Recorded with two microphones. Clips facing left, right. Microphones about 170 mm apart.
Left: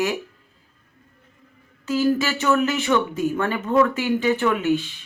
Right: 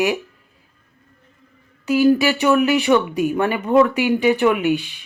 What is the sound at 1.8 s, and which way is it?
Speech, 15° right (ahead or behind).